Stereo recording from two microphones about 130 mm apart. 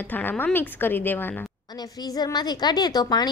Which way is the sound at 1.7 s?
30° left (ahead or behind).